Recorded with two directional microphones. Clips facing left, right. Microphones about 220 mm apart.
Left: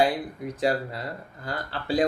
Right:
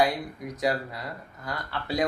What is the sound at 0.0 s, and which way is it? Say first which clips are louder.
Speech: left 2 dB; 30° left (ahead or behind).